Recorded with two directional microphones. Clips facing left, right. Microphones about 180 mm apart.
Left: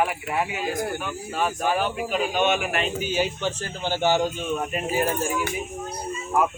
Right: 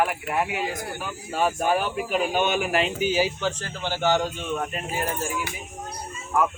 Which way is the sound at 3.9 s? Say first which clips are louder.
Left 1 dB; 15° left (ahead or behind).